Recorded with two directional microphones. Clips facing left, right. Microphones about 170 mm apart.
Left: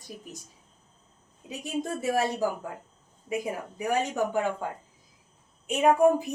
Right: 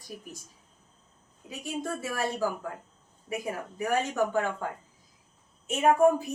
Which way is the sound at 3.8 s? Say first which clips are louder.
Even; 15° left (ahead or behind).